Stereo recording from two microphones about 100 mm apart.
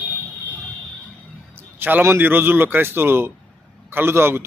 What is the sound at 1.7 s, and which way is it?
A man's voice, 20° right (ahead or behind).